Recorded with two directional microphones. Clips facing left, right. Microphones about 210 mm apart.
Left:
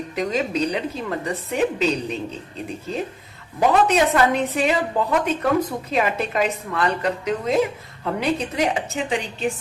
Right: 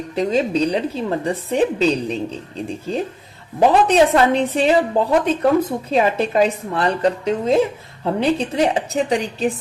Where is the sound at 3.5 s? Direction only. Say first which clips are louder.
Right 4 dB; 30° right (ahead or behind).